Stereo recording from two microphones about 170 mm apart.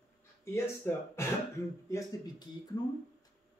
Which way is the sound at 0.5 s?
15° left (ahead or behind).